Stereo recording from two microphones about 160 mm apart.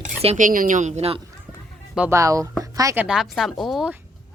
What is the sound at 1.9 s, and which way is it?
Speech, 15° right (ahead or behind).